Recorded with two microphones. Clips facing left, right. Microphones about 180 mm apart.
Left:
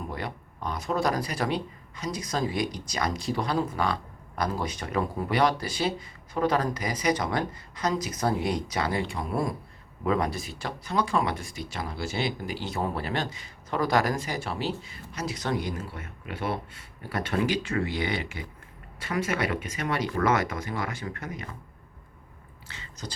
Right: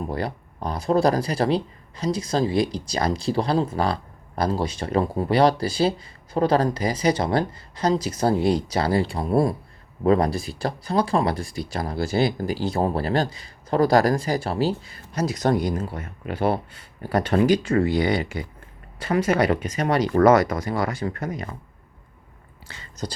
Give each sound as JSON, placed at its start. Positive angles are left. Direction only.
{"t": 0.1, "sound": "speech", "side_deg": -35}
{"t": 22.8, "sound": "speech", "side_deg": -40}